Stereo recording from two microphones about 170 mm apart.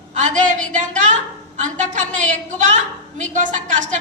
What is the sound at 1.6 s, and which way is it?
A woman's voice, 45° right (ahead or behind).